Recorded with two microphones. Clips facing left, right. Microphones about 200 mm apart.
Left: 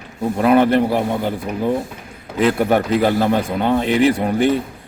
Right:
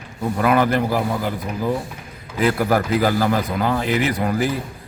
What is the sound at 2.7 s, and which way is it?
Speech, centre (ahead or behind).